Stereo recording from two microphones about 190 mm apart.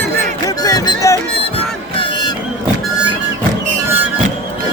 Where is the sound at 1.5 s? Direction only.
25° left (ahead or behind).